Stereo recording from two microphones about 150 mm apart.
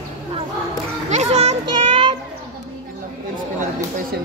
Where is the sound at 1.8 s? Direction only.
35° right (ahead or behind).